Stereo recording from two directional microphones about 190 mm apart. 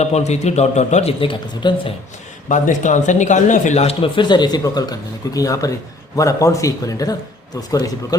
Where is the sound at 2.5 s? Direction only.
40° left (ahead or behind).